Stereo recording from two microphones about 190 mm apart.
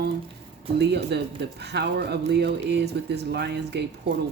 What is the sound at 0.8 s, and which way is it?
Speech, 65° right (ahead or behind).